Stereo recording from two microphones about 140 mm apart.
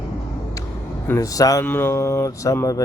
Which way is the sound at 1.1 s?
25° left (ahead or behind).